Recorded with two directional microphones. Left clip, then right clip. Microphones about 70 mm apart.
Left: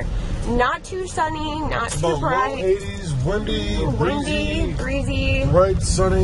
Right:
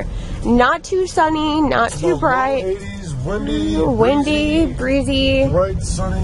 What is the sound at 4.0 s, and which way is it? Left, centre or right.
Speech, right.